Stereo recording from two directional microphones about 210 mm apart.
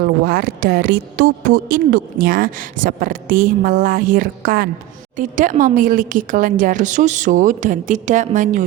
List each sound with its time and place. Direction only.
0.0 s speech: 45° right (ahead or behind)